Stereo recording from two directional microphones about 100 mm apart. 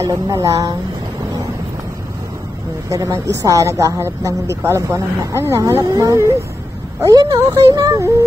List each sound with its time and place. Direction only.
0.0 s a woman's voice: 35° right (ahead or behind)
2.9 s a woman's voice: 30° right (ahead or behind)